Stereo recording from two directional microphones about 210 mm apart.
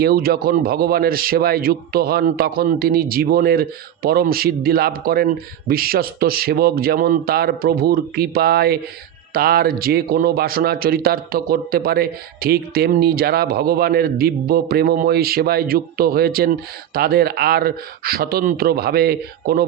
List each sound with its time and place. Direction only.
0.0 s a man's voice: 45° right (ahead or behind)